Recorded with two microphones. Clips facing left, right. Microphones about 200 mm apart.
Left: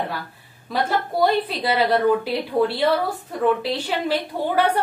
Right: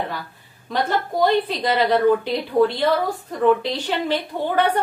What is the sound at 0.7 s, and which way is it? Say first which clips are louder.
A woman's voice: right 1 dB; 5° left (ahead or behind).